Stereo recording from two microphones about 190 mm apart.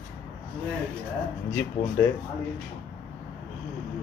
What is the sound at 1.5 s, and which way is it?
Speech, 15° left (ahead or behind).